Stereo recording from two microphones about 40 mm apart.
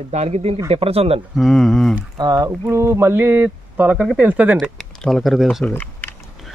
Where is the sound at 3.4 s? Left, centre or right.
Right.